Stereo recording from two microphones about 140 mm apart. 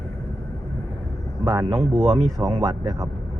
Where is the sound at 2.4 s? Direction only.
25° right (ahead or behind).